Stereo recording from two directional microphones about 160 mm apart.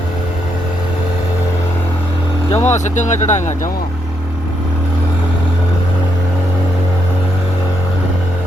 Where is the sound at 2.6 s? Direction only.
45° left (ahead or behind).